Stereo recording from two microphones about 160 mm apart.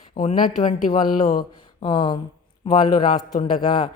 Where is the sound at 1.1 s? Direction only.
65° left (ahead or behind).